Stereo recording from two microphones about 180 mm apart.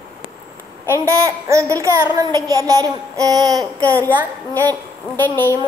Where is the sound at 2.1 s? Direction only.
20° right (ahead or behind).